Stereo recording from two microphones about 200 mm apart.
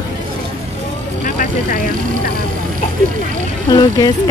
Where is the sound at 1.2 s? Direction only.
50° left (ahead or behind).